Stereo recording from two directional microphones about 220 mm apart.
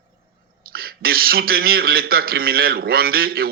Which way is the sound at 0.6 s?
45° right (ahead or behind).